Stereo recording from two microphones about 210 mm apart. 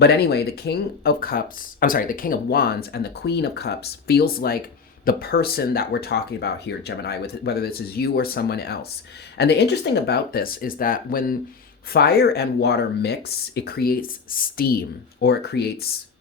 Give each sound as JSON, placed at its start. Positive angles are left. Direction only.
{"t": 0.0, "sound": "speech", "side_deg": 50}